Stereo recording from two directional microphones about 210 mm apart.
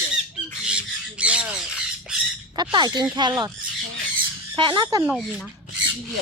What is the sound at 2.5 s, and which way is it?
Speech, 20° right (ahead or behind).